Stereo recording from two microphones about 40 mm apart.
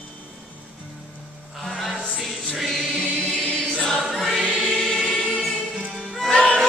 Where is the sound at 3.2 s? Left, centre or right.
Left.